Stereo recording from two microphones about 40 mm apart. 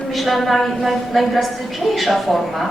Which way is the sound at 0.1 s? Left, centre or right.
Centre.